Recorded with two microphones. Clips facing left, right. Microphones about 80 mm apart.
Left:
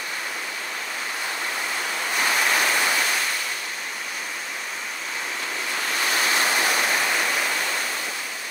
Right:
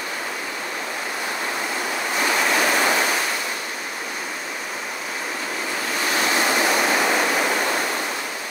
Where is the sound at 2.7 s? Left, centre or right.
Right.